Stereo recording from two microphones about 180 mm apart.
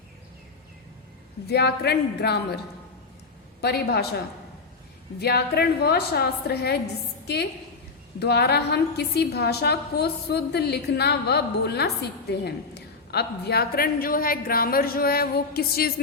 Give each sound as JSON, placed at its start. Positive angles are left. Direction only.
{"t": 1.5, "sound": "a woman's voice", "side_deg": 65}
{"t": 3.6, "sound": "a woman's voice", "side_deg": 60}
{"t": 5.2, "sound": "a woman's voice", "side_deg": 60}
{"t": 8.2, "sound": "a woman's voice", "side_deg": 65}